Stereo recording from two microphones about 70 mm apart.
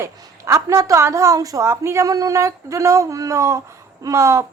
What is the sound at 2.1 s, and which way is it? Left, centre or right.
A woman's voice, right.